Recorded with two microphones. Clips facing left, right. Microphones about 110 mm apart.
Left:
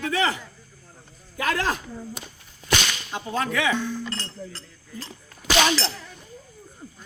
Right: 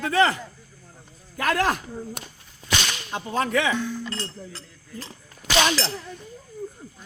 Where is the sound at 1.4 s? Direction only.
50° right (ahead or behind).